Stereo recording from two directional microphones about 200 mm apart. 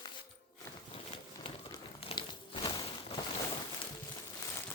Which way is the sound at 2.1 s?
25° left (ahead or behind).